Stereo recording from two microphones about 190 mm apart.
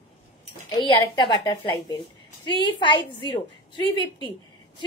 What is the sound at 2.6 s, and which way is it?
Speech, 25° left (ahead or behind).